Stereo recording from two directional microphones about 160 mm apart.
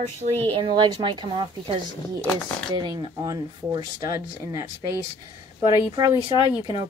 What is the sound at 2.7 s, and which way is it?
Speech, 25° right (ahead or behind).